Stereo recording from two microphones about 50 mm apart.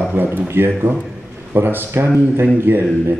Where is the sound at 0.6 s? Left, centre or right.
Right.